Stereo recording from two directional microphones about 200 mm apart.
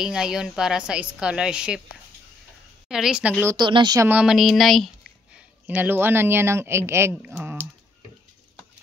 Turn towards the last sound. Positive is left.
turn(degrees=-10)  # may be behind; listen again after turning